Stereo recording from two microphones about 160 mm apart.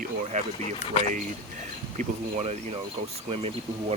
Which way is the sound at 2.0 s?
45° right (ahead or behind).